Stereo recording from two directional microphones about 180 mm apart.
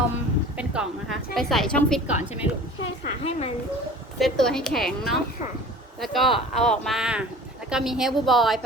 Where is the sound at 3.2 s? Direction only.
35° left (ahead or behind).